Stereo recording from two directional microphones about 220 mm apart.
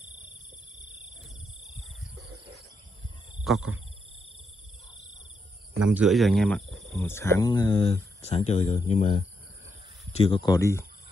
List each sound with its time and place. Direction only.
3.5 s speech: centre (ahead or behind)
5.9 s speech: centre (ahead or behind)